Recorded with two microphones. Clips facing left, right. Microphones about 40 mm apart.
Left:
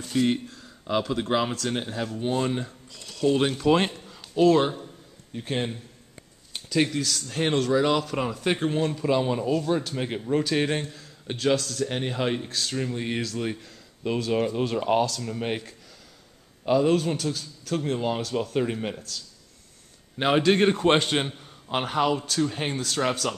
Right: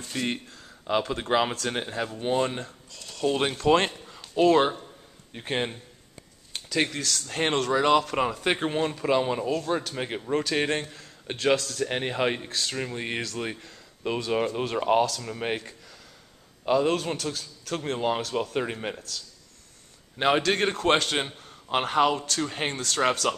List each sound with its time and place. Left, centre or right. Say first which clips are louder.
0.0 s speech: left 6 dB; centre
0.8 s a man's voice: left 1 dB; centre
2.5 s a man's voice: left 5 dB; centre; by 5.8 s right
6.5 s speech: left 3 dB; centre
7.2 s a man's voice: left 1 dB; centre
15.2 s a man's voice: left 1 dB; centre
15.5 s a sound: even; centre
16.6 s a man's voice: left 2 dB; centre
21.3 s a sound: left 3 dB; centre
21.6 s a man's voice: right 2 dB; centre
22.1 s a man's voice: left 2 dB; centre
22.4 s a man's voice: left 3 dB; centre